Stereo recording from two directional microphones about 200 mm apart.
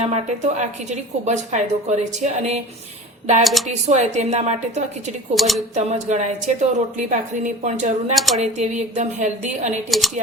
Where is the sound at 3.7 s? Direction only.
35° right (ahead or behind).